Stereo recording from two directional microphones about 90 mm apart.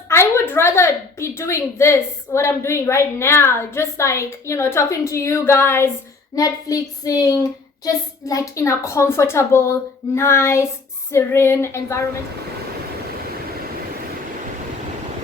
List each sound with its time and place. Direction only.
0.1 s a woman's voice: 30° left (ahead or behind)
6.3 s a woman's voice: 40° left (ahead or behind)